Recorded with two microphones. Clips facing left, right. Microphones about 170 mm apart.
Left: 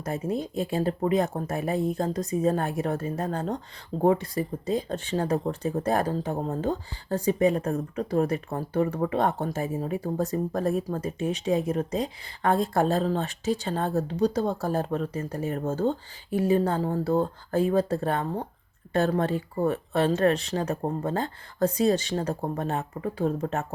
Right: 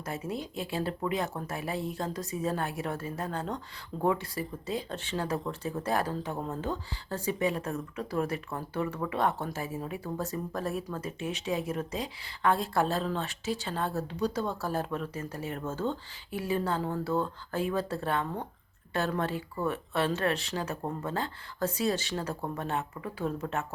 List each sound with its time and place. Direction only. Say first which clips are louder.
0.0 s speech: left 6 dB; 40° left (ahead or behind)